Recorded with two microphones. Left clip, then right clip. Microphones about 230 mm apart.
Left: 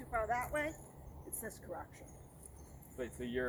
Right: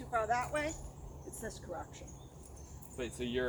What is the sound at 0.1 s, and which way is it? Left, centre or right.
Speech, centre.